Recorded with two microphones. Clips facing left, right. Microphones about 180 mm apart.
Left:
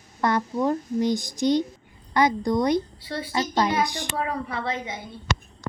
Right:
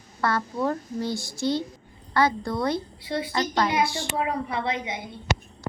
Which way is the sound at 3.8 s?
15° left (ahead or behind).